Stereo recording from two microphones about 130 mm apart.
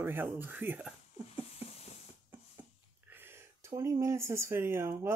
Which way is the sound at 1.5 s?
55° left (ahead or behind).